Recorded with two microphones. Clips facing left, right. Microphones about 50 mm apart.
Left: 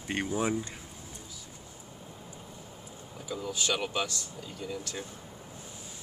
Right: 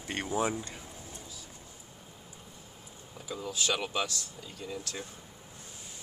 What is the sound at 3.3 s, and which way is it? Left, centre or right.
Speech, right.